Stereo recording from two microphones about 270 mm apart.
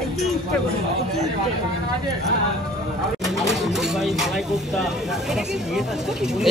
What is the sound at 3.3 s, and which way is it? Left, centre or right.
Speech, centre.